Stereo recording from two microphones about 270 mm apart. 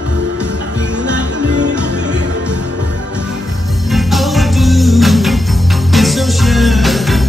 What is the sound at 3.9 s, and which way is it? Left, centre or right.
Music, centre.